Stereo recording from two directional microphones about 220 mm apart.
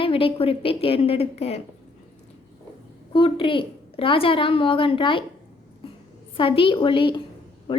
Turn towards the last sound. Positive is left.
turn(degrees=25)  # may be behind; listen again after turning